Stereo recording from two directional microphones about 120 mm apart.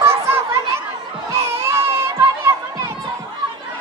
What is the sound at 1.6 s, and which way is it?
Crowd, 20° right (ahead or behind).